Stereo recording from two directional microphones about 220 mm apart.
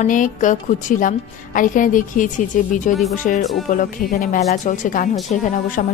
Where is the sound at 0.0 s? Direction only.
35° left (ahead or behind).